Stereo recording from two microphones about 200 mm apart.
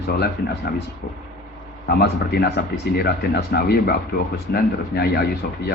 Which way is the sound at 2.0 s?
55° left (ahead or behind).